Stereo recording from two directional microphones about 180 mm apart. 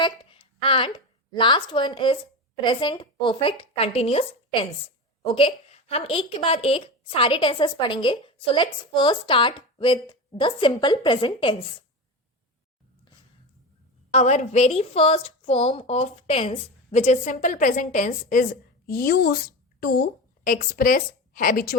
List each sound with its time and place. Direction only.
0.0 s a woman's voice: 30° left (ahead or behind)
14.1 s a woman's voice: 40° left (ahead or behind)
18.9 s a woman's voice: 60° left (ahead or behind)